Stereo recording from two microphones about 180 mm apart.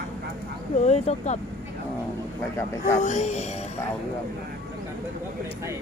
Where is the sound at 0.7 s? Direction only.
40° left (ahead or behind).